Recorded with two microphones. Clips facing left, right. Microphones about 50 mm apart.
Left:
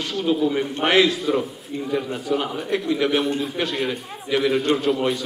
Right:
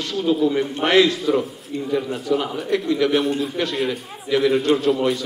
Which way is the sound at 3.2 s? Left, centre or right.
Centre.